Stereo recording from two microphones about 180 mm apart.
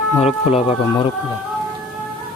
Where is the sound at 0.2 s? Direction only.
35° left (ahead or behind).